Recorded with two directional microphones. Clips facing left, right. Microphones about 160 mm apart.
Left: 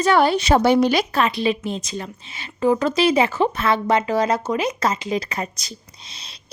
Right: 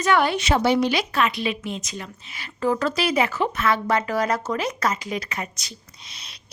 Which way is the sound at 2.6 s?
20° left (ahead or behind).